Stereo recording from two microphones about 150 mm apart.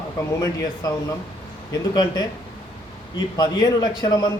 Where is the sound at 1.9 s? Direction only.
25° left (ahead or behind).